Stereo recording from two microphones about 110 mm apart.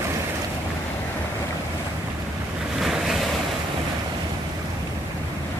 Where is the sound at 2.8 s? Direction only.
5° right (ahead or behind).